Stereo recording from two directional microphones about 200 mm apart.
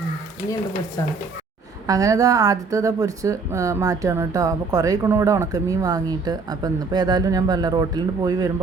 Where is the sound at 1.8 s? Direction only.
15° right (ahead or behind).